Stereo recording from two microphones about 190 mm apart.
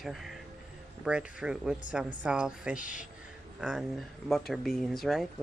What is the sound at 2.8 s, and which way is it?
Speech, 45° left (ahead or behind).